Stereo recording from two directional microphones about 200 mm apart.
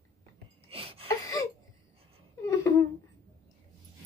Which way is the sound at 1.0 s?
15° left (ahead or behind).